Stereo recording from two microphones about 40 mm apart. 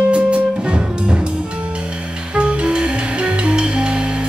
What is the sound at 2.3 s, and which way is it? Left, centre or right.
Music, right.